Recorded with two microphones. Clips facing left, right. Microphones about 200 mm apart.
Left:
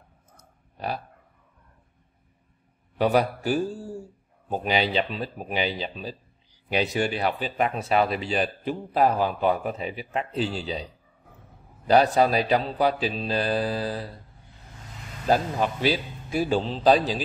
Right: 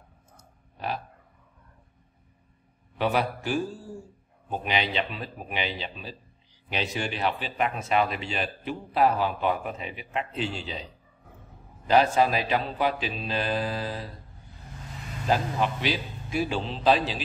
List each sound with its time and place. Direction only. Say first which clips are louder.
0.4 s clicking: left 2 dB; 35° left (ahead or behind)
3.0 s speech: left 4 dB; 40° left (ahead or behind)
11.9 s speech: left 2 dB; 40° left (ahead or behind)
15.2 s speech: left 3 dB; 40° left (ahead or behind)